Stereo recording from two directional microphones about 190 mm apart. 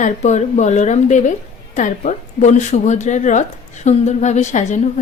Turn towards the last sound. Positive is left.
turn(degrees=40)  # may be behind; listen again after turning